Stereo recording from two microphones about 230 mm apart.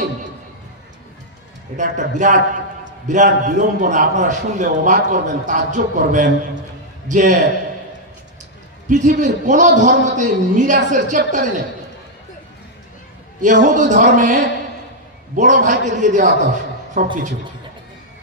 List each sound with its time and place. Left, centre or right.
1.8 s a man's voice: right
8.8 s a man's voice: right
13.4 s a man's voice: right